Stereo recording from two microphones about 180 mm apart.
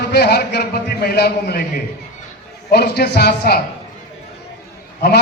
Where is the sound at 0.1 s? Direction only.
65° left (ahead or behind).